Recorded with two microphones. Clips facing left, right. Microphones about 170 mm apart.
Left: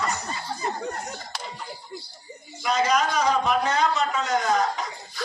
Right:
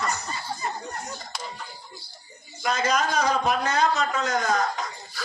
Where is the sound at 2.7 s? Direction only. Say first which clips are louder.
Left 2 dB; 45° right (ahead or behind).